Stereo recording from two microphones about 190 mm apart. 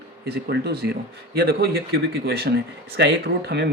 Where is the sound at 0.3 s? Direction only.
60° right (ahead or behind).